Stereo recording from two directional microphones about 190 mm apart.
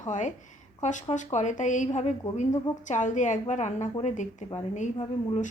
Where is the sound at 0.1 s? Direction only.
40° left (ahead or behind).